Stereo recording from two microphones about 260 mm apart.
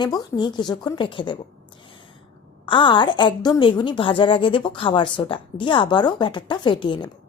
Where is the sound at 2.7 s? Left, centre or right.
Centre.